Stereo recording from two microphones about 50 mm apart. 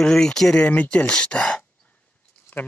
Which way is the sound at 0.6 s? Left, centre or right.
Left.